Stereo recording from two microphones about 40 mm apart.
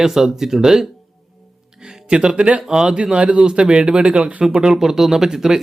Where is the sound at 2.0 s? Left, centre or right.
Right.